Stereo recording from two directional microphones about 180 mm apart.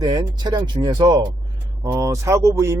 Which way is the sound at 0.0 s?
25° right (ahead or behind).